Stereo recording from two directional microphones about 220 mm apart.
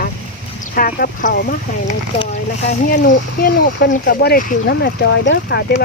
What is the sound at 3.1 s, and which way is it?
Speech, 45° left (ahead or behind).